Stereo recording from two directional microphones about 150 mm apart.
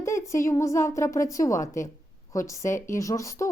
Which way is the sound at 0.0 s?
20° left (ahead or behind).